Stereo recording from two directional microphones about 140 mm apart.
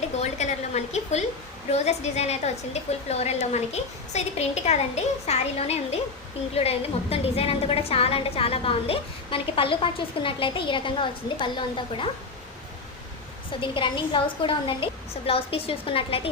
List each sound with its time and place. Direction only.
0.2 s a sound: 55° left (ahead or behind)
1.7 s a woman's voice: 50° left (ahead or behind)
13.6 s a woman's voice: 35° left (ahead or behind)